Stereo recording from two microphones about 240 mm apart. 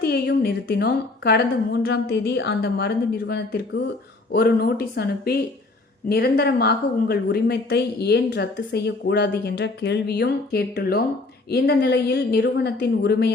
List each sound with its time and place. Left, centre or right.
0.0 s a woman's voice: left